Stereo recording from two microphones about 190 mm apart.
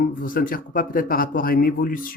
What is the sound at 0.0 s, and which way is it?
Speech, 45° left (ahead or behind).